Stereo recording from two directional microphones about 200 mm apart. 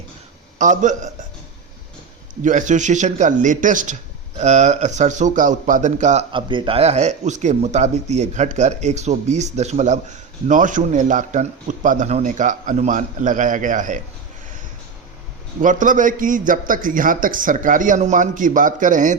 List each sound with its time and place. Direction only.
0.6 s speech: 40° right (ahead or behind)
2.4 s speech: 40° right (ahead or behind)
6.3 s speech: 25° right (ahead or behind)
15.6 s speech: 40° right (ahead or behind)